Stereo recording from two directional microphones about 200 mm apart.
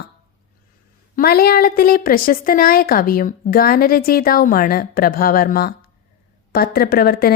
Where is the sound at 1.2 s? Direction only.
50° left (ahead or behind).